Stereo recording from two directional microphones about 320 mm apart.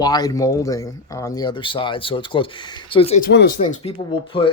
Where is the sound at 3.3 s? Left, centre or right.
Left.